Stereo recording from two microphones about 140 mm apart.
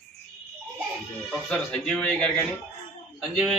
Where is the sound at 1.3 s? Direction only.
5° left (ahead or behind).